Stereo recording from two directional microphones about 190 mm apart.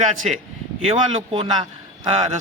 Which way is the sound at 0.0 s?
40° right (ahead or behind).